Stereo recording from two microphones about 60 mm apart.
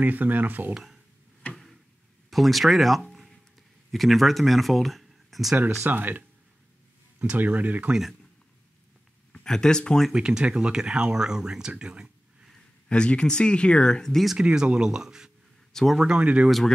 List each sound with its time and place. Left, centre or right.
0.0 s speech: right
2.3 s speech: centre
5.9 s speech: right
7.9 s speech: centre
9.3 s speech: centre
10.1 s speech: centre
12.8 s speech: centre
14.4 s speech: centre
15.7 s speech: centre
16.0 s speech: centre
16.4 s speech: centre